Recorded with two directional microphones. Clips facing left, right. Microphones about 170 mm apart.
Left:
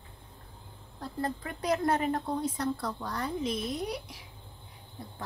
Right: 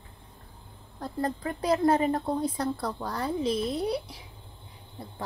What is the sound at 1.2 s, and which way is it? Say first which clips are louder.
Speech: right 4 dB; 35° right (ahead or behind).